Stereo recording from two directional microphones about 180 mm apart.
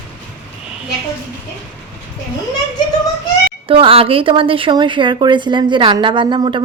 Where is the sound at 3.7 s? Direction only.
30° right (ahead or behind).